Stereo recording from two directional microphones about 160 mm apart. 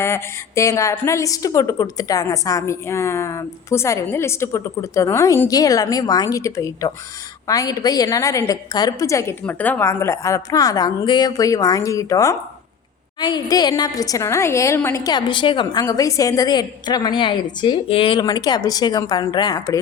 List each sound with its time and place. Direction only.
0.0 s a woman's voice: 20° left (ahead or behind)